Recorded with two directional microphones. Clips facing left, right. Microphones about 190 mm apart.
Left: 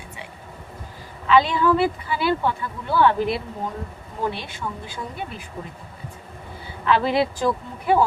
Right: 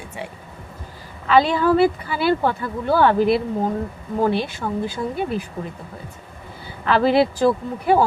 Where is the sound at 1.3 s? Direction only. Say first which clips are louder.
Right 2 dB; 40° right (ahead or behind).